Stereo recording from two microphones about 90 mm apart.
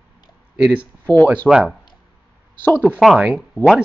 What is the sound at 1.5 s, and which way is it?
Speech, 5° right (ahead or behind).